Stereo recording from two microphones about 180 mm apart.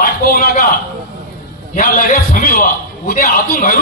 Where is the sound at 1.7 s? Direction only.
50° left (ahead or behind).